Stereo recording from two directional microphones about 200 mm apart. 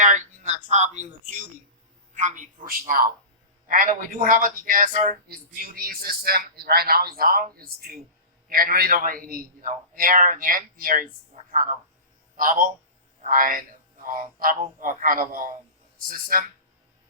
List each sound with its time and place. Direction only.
0.0 s a man's voice: 40° right (ahead or behind)
12.4 s a man's voice: 45° right (ahead or behind)